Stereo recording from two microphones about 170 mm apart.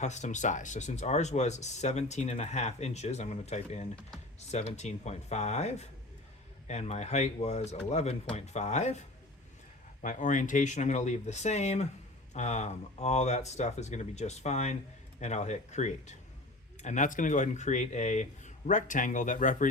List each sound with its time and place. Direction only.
0.0 s speech: 45° left (ahead or behind)
10.0 s speech: 50° left (ahead or behind)